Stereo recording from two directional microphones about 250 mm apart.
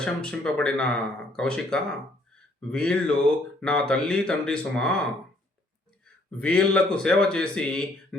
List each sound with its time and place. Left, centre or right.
0.0 s speech: centre
6.3 s speech: centre